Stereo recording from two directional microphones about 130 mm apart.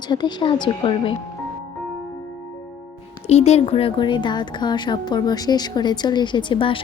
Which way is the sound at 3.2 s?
55° left (ahead or behind).